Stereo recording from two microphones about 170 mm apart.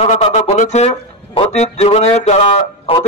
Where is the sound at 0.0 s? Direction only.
40° left (ahead or behind).